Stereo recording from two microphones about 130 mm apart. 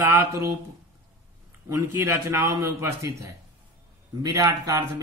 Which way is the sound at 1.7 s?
20° right (ahead or behind).